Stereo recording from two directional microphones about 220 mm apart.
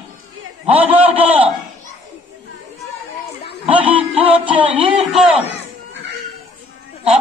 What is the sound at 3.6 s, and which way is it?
Music, 25° right (ahead or behind).